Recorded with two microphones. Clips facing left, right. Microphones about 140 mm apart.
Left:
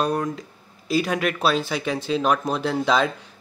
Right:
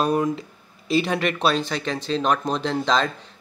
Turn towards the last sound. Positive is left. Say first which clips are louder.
# left 1 dB
turn(degrees=10)  # may be behind; listen again after turning